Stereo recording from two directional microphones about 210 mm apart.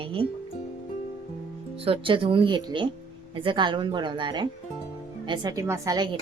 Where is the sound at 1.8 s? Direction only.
25° right (ahead or behind).